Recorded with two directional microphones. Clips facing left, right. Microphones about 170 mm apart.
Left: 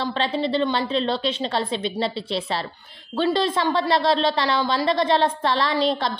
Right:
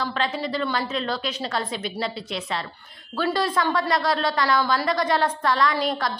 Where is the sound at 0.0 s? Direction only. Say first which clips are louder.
Left 3 dB; 30° left (ahead or behind).